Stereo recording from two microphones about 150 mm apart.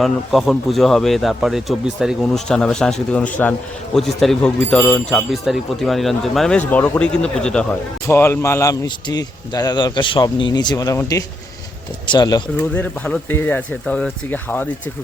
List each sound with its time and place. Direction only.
0.0 s speech: centre (ahead or behind)
5.1 s speech: centre (ahead or behind)
8.0 s speech: 15° left (ahead or behind)
12.7 s speech: 10° left (ahead or behind)